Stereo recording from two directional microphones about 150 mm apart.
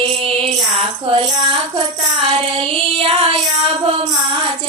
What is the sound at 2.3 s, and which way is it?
Child singing, 35° right (ahead or behind).